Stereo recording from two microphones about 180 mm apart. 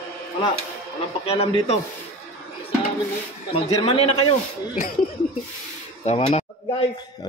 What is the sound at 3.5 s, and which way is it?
Speech, 30° left (ahead or behind).